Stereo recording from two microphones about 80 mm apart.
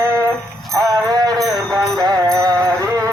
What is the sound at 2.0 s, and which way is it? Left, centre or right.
Music, right.